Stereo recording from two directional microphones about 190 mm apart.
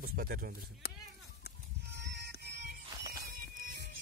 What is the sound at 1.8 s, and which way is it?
Music, 60° right (ahead or behind).